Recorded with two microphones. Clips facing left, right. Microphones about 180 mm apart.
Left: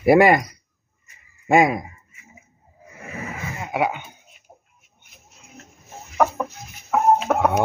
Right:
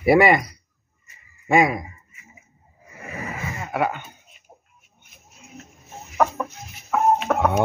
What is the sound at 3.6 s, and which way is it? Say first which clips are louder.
Speech: left 1 dB; 10° left (ahead or behind).